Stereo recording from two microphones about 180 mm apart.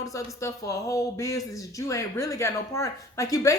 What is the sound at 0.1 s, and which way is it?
A woman's voice, 15° left (ahead or behind).